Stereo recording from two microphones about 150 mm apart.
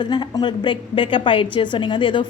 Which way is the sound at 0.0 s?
30° left (ahead or behind).